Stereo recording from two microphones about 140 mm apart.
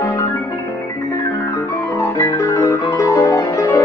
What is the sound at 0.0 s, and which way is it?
Music, 25° left (ahead or behind).